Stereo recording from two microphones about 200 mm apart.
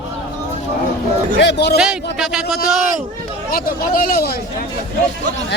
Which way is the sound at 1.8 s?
5° right (ahead or behind).